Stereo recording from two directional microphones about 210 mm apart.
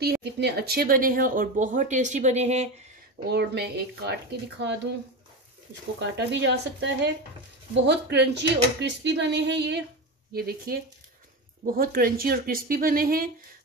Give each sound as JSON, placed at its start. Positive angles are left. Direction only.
{"t": 0.0, "sound": "speech", "side_deg": -50}
{"t": 3.3, "sound": "speech", "side_deg": -50}
{"t": 5.9, "sound": "speech", "side_deg": -55}